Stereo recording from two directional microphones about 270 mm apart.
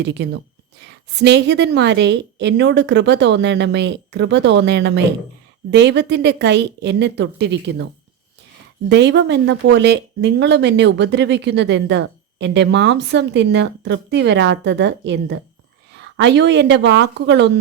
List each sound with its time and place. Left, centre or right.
0.0 s speech: right
8.9 s speech: right